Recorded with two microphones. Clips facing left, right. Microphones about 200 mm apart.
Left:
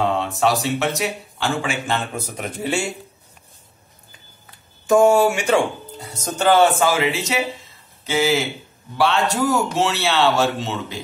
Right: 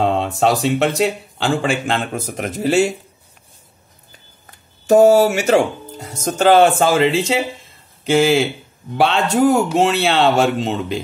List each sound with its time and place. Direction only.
0.0 s a sound: 55° right (ahead or behind)
0.6 s speech: 60° right (ahead or behind)
2.0 s speech: 45° right (ahead or behind)
4.5 s speech: 40° right (ahead or behind)